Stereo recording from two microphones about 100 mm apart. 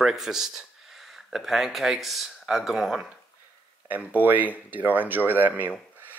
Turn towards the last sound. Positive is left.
turn(degrees=-20)  # may be behind; listen again after turning